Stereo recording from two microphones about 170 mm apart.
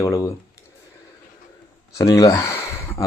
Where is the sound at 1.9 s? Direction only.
20° left (ahead or behind).